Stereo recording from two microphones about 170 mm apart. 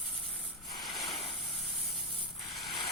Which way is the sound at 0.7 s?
25° left (ahead or behind).